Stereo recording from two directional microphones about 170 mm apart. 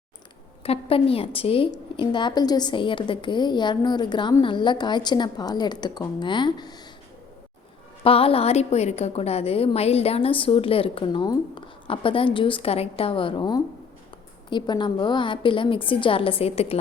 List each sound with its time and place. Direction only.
0.6 s a woman's voice: 35° left (ahead or behind)
8.0 s a woman's voice: 35° left (ahead or behind)